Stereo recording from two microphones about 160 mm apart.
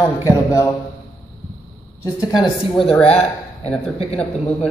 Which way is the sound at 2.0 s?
25° left (ahead or behind).